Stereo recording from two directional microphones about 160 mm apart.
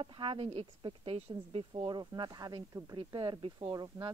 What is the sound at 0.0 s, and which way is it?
Speech, 30° right (ahead or behind).